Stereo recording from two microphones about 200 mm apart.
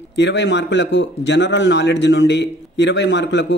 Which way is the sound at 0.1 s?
60° left (ahead or behind).